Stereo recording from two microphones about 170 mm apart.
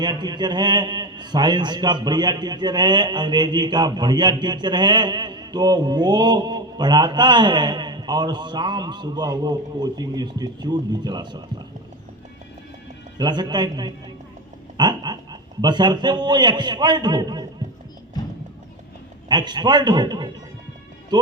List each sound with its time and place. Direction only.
0.0 s a man's voice: 25° right (ahead or behind)
13.1 s a man's voice: 25° right (ahead or behind)
19.3 s a man's voice: 25° right (ahead or behind)